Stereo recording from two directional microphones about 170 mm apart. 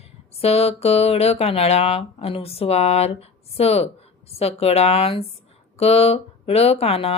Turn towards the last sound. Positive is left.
turn(degrees=35)  # may be behind; listen again after turning